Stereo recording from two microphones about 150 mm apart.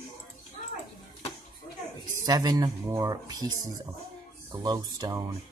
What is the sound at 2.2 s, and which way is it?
Speech, 25° right (ahead or behind).